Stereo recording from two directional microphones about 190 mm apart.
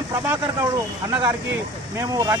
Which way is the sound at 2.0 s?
15° right (ahead or behind).